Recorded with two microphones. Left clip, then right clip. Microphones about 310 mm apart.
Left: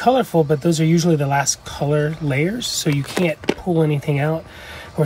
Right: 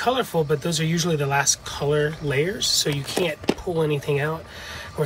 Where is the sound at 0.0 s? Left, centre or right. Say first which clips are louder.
Left 6 dB; centre.